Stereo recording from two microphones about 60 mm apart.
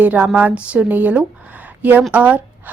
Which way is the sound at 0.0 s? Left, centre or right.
Right.